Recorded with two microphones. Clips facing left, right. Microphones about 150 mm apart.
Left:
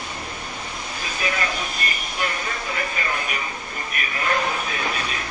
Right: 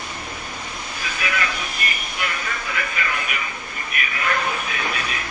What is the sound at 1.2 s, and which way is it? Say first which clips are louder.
Vehicle: left 1 dB; 35° left (ahead or behind).